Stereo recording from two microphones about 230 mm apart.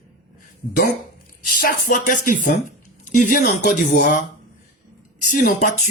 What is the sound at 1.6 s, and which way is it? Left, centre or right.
Speech, left.